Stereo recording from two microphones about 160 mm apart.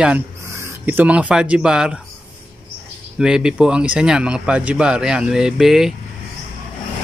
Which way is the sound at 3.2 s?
5° right (ahead or behind).